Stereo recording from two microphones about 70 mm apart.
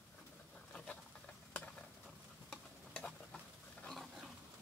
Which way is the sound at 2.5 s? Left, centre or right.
Centre.